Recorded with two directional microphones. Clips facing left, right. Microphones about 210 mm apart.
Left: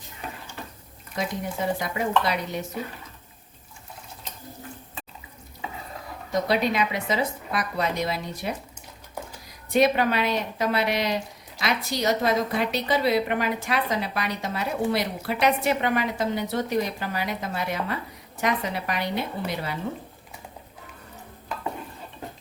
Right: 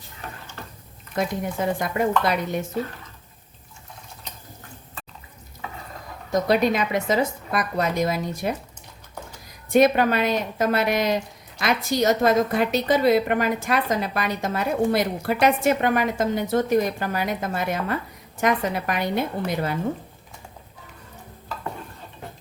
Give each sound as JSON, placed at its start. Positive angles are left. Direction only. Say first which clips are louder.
{"t": 1.2, "sound": "a woman's voice", "louder": "right 3 dB", "side_deg": -50}
{"t": 6.5, "sound": "a woman's voice", "louder": "right 4 dB", "side_deg": -45}
{"t": 9.6, "sound": "a woman's voice", "louder": "right 3 dB", "side_deg": -50}